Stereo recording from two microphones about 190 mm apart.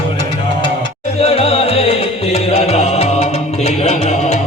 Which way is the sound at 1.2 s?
30° left (ahead or behind).